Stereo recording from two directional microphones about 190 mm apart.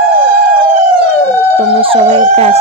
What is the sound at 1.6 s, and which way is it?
Speech, 30° right (ahead or behind).